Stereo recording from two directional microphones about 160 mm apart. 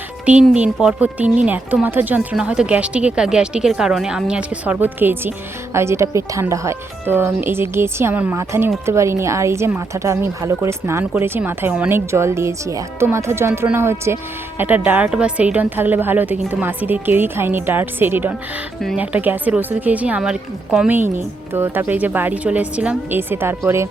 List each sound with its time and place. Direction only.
0.3 s a woman's voice: 5° right (ahead or behind)